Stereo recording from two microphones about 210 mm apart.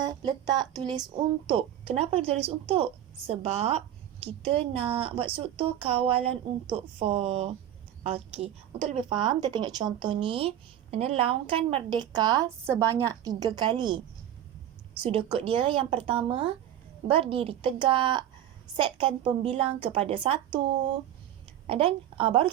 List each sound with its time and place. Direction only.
0.0 s speech: 20° right (ahead or behind)
15.0 s speech: 25° right (ahead or behind)